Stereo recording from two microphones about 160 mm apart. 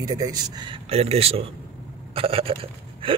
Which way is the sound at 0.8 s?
40° right (ahead or behind).